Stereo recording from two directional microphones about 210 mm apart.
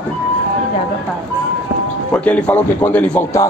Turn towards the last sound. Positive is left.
turn(degrees=5)  # may be behind; listen again after turning